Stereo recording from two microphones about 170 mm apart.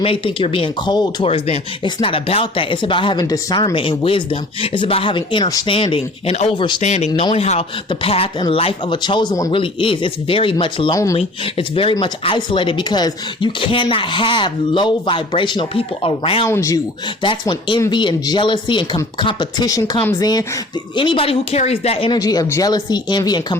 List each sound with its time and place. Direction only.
0.0 s speech: 30° left (ahead or behind)
6.8 s speech: 40° left (ahead or behind); by 11.2 s 20° left (ahead or behind)
11.2 s speech: 35° left (ahead or behind)
16.5 s speech: 20° left (ahead or behind)
20.9 s speech: 30° left (ahead or behind)
22.1 s speech: 20° left (ahead or behind)